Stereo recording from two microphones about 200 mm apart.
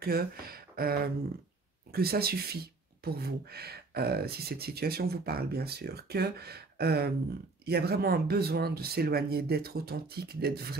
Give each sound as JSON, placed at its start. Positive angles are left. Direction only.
{"t": 0.0, "sound": "speech", "side_deg": -50}